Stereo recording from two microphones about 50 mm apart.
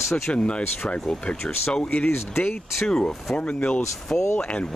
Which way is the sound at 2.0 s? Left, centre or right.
Left.